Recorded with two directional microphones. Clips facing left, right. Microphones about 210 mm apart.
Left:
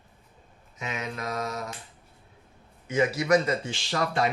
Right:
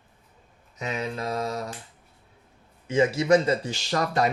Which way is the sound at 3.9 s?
40° right (ahead or behind).